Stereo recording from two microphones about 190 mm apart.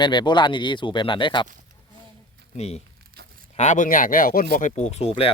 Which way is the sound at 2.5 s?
35° left (ahead or behind).